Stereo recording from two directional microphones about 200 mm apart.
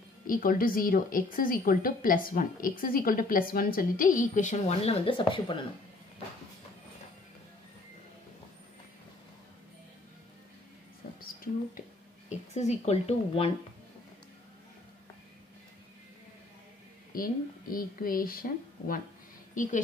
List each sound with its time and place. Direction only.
0.3 s a woman's voice: 45° left (ahead or behind); by 5.6 s 25° left (ahead or behind)
11.1 s a sound: 45° left (ahead or behind)
12.3 s speech: 35° left (ahead or behind)
17.1 s speech: 45° left (ahead or behind)